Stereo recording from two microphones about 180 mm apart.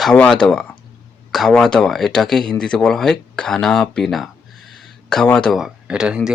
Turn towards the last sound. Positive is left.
turn(degrees=-5)  # may be behind; listen again after turning